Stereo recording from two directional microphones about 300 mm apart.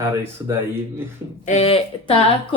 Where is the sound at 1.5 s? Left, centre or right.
Left.